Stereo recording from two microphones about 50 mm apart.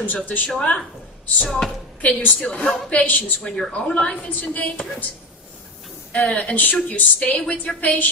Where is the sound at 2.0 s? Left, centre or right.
Left.